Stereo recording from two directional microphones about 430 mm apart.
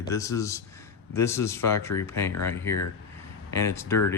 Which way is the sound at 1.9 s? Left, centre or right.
Left.